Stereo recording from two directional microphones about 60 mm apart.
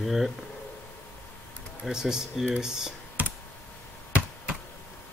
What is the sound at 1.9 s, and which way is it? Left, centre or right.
Speech, centre.